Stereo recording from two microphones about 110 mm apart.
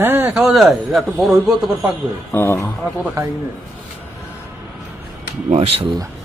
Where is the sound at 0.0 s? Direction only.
20° right (ahead or behind).